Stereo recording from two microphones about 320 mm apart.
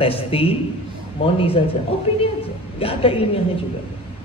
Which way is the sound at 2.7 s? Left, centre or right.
Centre.